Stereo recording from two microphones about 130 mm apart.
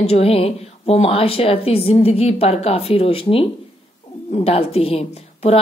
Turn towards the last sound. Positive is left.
turn(degrees=50)  # may be behind; listen again after turning